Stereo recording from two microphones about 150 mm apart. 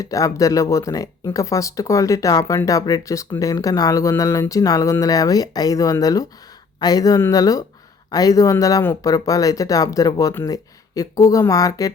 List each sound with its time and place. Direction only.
0.0 s speech: 20° left (ahead or behind)